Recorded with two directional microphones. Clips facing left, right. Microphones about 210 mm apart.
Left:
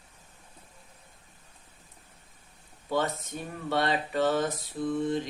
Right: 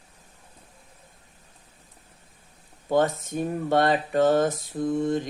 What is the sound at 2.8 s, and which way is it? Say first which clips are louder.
Speech: right 7 dB; 45° right (ahead or behind).